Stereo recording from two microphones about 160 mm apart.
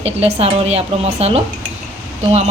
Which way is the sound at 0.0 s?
40° right (ahead or behind).